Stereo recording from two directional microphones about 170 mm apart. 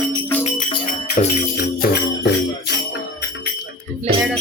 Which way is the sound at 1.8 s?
80° left.